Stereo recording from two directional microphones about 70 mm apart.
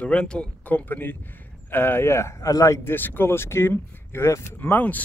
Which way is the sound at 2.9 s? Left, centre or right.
Left.